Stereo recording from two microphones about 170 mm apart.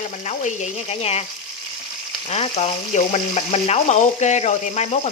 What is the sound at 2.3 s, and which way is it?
Speech, 40° left (ahead or behind).